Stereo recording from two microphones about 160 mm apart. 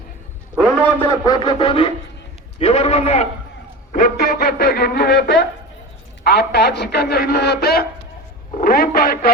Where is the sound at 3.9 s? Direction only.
65° left (ahead or behind).